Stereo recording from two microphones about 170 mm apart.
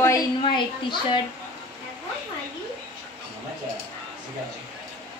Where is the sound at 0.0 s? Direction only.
20° left (ahead or behind).